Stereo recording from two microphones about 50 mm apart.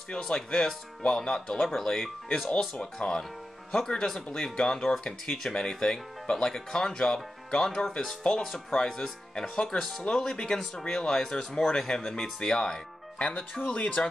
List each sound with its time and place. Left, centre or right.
0.1 s speech: centre
8.5 s speech: centre
8.7 s speech: centre
13.4 s speech: left